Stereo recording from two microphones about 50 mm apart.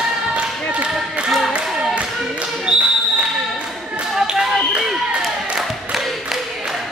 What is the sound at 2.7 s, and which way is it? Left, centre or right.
Basketball bounce, centre.